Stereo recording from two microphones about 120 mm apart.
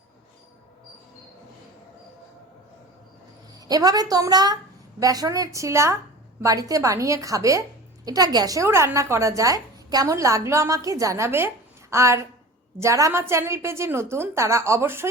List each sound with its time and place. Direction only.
3.7 s a woman's voice: 30° right (ahead or behind)